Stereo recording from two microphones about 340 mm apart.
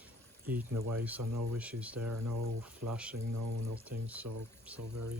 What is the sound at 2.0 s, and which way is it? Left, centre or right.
Speech, right.